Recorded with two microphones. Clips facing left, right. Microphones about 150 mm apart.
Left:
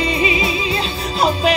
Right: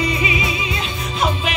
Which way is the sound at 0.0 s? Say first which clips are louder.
Left 3 dB; 30° left (ahead or behind).